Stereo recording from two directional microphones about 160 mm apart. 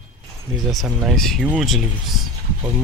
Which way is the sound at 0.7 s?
Centre (ahead or behind).